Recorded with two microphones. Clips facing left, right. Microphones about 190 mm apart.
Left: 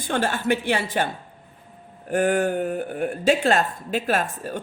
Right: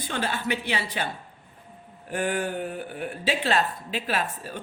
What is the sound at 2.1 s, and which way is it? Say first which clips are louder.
Speech: left 7 dB; 45° left (ahead or behind).